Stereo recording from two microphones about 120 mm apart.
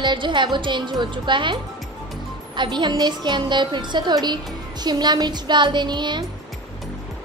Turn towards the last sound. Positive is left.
turn(degrees=-40)  # may be behind; listen again after turning